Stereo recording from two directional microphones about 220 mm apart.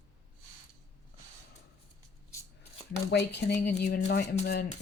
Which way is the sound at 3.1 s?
50° left (ahead or behind).